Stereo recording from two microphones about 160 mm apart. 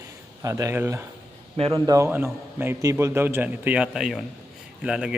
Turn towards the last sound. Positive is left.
turn(degrees=-5)  # may be behind; listen again after turning